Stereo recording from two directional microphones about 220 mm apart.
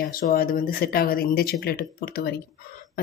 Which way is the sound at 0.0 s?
40° left (ahead or behind).